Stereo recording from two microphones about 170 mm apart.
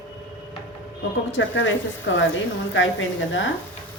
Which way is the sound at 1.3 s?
90° left.